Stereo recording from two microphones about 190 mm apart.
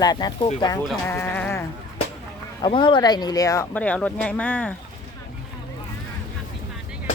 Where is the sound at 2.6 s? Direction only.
25° left (ahead or behind); by 4.7 s 5° left (ahead or behind).